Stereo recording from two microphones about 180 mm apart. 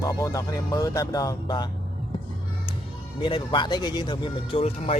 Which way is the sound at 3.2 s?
25° left (ahead or behind).